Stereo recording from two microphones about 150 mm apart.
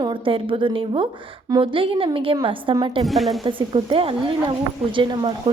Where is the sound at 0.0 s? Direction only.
35° right (ahead or behind).